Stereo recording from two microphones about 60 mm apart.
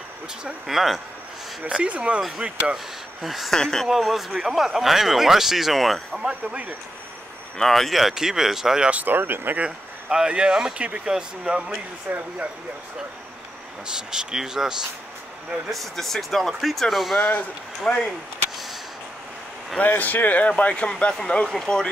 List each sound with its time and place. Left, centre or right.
0.7 s speech: centre
1.7 s speech: centre
2.4 s speech: centre
3.5 s speech: centre
3.8 s speech: centre
6.2 s speech: right
7.5 s speech: centre
8.9 s speech: right
9.7 s speech: centre
13.8 s speech: centre
15.7 s speech: centre
17.9 s speech: centre
19.8 s speech: left; by 21.8 s centre